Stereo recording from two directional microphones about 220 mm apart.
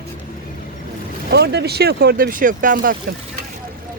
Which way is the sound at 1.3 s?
50° right (ahead or behind).